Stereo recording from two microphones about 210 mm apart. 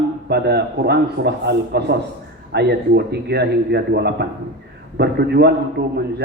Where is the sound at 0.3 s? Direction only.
50° right (ahead or behind).